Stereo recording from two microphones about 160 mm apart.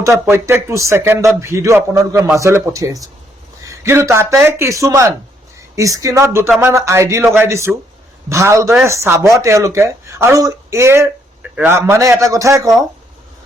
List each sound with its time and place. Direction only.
0.0 s a man's voice: 15° right (ahead or behind)